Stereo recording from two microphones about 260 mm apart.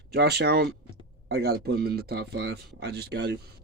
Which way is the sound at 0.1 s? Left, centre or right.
Right.